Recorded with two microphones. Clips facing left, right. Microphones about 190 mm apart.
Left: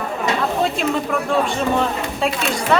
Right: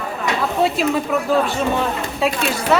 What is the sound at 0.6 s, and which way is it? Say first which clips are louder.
Speech: right 2 dB; 5° right (ahead or behind).